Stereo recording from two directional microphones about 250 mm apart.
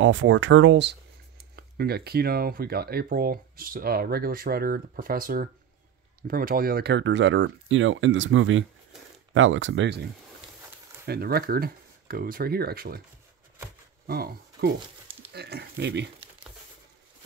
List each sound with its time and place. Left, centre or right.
0.0 s speech: right
11.1 s speech: right
14.0 s speech: right